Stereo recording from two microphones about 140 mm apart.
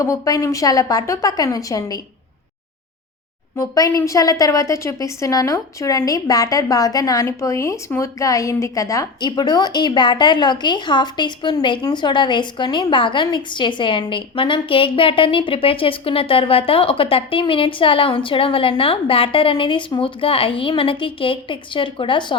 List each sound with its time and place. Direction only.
0.0 s a woman's voice: 20° left (ahead or behind)
3.5 s a woman's voice: 20° left (ahead or behind)